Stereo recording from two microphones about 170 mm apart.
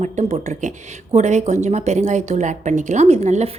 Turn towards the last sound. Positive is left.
turn(degrees=-40)  # may be behind; listen again after turning